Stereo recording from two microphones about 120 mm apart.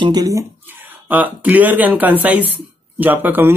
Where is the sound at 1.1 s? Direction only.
15° right (ahead or behind).